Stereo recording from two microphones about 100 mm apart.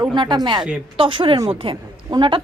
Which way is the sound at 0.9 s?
60° right (ahead or behind).